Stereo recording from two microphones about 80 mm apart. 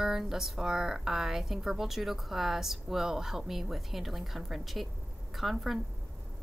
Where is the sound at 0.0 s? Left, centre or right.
Centre.